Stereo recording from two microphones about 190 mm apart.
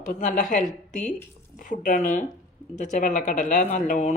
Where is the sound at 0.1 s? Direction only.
40° left (ahead or behind).